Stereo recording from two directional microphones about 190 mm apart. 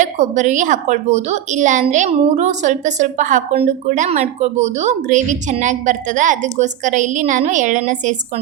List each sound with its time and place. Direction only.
0.0 s a woman's voice: 40° right (ahead or behind)